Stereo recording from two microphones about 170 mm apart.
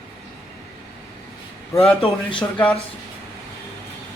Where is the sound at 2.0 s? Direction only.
35° left (ahead or behind).